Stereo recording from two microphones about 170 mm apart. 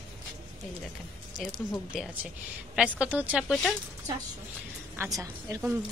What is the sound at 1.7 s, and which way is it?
A woman's voice, 5° right (ahead or behind).